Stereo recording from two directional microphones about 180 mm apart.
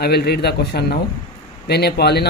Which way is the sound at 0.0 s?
65° left (ahead or behind).